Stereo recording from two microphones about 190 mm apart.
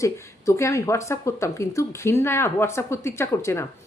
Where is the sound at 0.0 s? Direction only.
15° left (ahead or behind).